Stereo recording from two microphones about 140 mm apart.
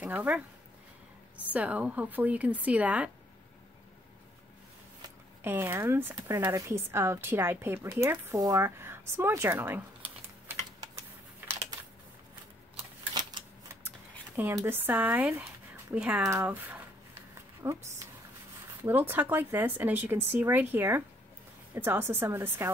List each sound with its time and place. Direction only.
0.0 s speech: 10° right (ahead or behind)
1.5 s speech: 10° right (ahead or behind)
5.4 s speech: 15° right (ahead or behind)
10.8 s typing: 20° right (ahead or behind)
13.2 s a sound: 30° right (ahead or behind)
13.7 s a sound: 15° right (ahead or behind)
16.2 s a woman's voice: 15° right (ahead or behind)